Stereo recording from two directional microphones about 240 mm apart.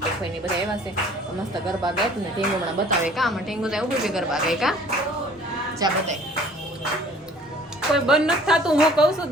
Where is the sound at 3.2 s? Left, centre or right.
Centre.